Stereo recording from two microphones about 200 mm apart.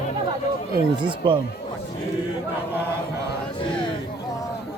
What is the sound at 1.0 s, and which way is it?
Speech, 25° right (ahead or behind).